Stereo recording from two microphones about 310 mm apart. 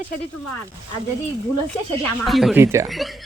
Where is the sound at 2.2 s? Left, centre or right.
Centre.